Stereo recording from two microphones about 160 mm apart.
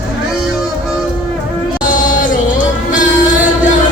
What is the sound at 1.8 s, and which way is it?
Music, 55° left (ahead or behind).